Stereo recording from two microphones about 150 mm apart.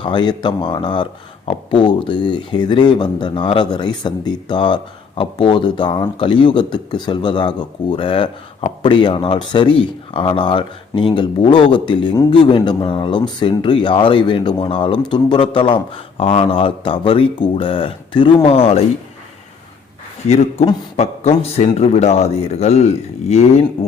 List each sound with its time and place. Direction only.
0.0 s speech: 30° left (ahead or behind)
20.2 s speech: 45° left (ahead or behind)